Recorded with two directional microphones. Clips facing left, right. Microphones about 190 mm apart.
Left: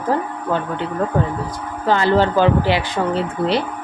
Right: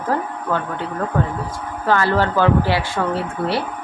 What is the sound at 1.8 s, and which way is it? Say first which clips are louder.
Speech: left 2 dB; 20° left (ahead or behind).